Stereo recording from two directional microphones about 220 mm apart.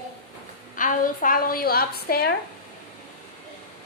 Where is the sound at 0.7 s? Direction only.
35° left (ahead or behind).